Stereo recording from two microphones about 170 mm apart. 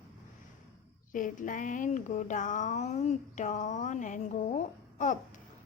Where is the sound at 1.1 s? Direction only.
50° left (ahead or behind).